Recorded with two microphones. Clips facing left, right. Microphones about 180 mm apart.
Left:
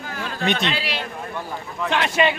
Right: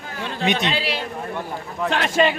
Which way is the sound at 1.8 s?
40° right (ahead or behind).